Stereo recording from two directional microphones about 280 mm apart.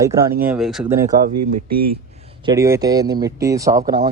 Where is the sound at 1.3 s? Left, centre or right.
Right.